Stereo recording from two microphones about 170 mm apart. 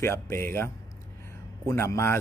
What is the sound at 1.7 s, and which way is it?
Speech, 15° left (ahead or behind).